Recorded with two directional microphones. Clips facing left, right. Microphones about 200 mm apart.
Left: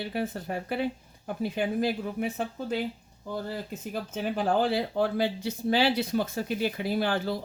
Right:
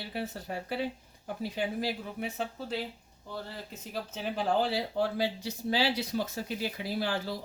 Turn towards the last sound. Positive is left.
turn(degrees=55)  # may be behind; listen again after turning